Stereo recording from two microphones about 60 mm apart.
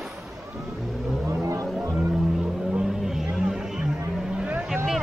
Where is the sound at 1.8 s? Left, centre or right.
Right.